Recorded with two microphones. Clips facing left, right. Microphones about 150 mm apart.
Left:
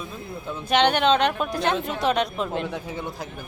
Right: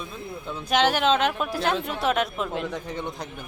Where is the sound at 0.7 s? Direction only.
5° right (ahead or behind).